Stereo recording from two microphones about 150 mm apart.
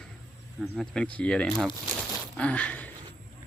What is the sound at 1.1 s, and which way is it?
Speech, 10° left (ahead or behind).